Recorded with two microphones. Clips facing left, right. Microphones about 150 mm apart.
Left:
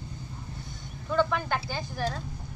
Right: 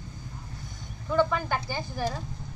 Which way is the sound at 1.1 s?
10° right (ahead or behind).